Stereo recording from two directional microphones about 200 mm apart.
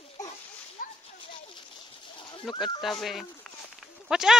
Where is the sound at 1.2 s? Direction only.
25° left (ahead or behind).